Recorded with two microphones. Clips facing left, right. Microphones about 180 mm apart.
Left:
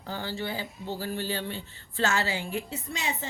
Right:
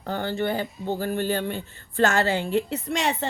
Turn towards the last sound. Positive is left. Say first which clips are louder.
# right 8 dB
turn(degrees=-70)  # may be behind; listen again after turning